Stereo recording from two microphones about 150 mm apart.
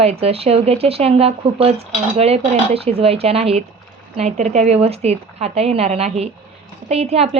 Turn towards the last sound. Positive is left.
turn(degrees=-45)  # may be behind; listen again after turning